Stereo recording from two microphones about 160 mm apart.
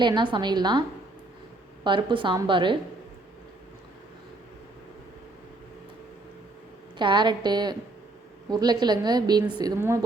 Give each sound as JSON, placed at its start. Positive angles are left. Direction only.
{"t": 0.0, "sound": "a woman's voice", "side_deg": -30}
{"t": 7.0, "sound": "a woman's voice", "side_deg": -30}